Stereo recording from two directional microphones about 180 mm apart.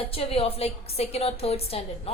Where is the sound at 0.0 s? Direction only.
30° left (ahead or behind).